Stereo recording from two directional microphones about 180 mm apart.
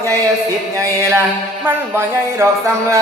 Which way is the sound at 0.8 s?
15° right (ahead or behind).